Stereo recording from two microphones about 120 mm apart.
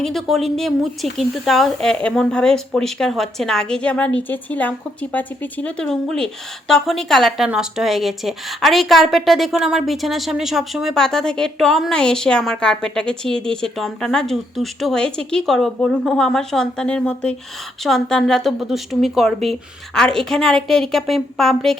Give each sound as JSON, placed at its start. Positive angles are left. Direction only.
{"t": 0.0, "sound": "a woman's voice", "side_deg": 0}